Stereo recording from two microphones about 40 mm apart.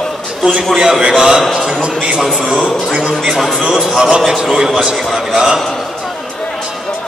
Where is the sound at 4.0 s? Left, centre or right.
Centre.